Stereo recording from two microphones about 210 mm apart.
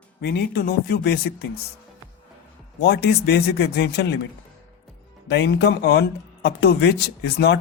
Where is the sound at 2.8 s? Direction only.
50° left (ahead or behind).